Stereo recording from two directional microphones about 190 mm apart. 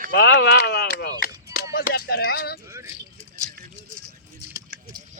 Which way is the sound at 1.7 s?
55° left (ahead or behind).